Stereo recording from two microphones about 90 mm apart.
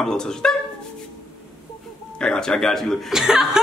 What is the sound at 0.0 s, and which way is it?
Speech, 5° left (ahead or behind).